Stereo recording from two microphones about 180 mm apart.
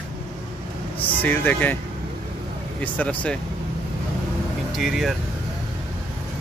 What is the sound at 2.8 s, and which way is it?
Speech, 5° left (ahead or behind).